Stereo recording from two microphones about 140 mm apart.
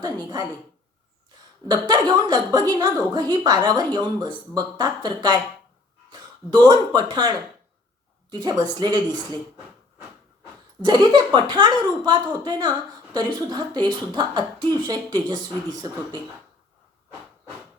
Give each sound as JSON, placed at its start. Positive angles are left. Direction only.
{"t": 0.0, "sound": "a woman's voice", "side_deg": -25}
{"t": 1.6, "sound": "a woman's voice", "side_deg": -30}
{"t": 10.8, "sound": "a woman's voice", "side_deg": -30}